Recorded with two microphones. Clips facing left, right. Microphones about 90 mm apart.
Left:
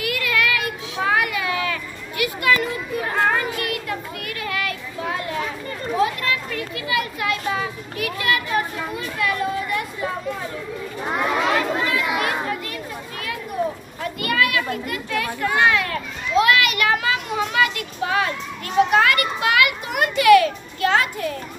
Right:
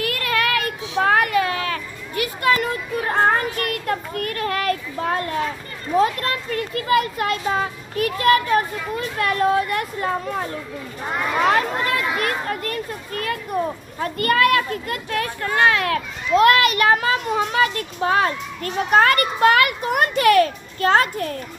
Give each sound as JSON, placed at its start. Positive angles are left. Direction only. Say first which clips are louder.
{"t": 0.0, "sound": "children playing", "louder": "right 1 dB", "side_deg": -40}
{"t": 5.9, "sound": "a child's voice", "louder": "right 3 dB", "side_deg": -45}
{"t": 11.5, "sound": "children playing", "louder": "right 1 dB", "side_deg": -45}
{"t": 14.0, "sound": "a child's voice", "louder": "right 4 dB", "side_deg": -45}
{"t": 14.9, "sound": "children playing", "louder": "right 1 dB", "side_deg": -45}
{"t": 16.3, "sound": "a child's voice", "louder": "right 3 dB", "side_deg": -40}